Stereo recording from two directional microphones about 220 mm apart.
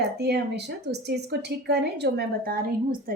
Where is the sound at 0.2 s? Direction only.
50° right (ahead or behind).